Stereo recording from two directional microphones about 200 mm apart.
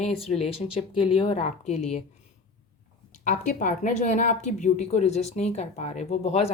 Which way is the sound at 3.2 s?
40° left (ahead or behind).